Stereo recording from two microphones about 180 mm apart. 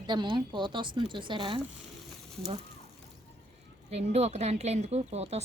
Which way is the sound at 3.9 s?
35° right (ahead or behind).